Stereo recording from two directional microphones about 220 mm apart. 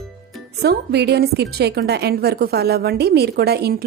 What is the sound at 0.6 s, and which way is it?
A woman's voice, 50° right (ahead or behind).